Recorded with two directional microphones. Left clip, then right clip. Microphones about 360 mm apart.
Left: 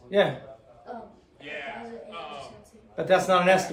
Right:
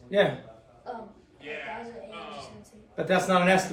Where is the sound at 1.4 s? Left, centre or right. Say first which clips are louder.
Even; left.